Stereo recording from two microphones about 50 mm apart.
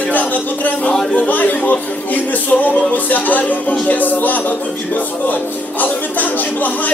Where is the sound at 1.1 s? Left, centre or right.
Left.